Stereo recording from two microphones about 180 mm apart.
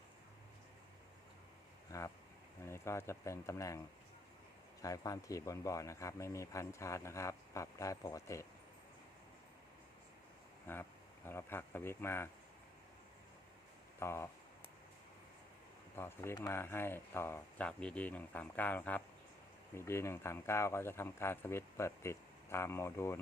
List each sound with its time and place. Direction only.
1.9 s speech: 15° left (ahead or behind)
4.8 s speech: 20° left (ahead or behind)
10.7 s speech: 10° left (ahead or behind)
14.0 s speech: 15° left (ahead or behind)
16.0 s speech: 15° left (ahead or behind)